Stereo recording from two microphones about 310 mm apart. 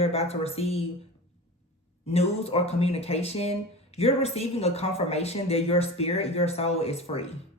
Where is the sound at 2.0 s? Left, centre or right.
Centre.